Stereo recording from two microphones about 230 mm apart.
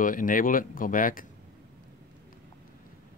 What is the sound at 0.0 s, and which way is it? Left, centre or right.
Speech, left.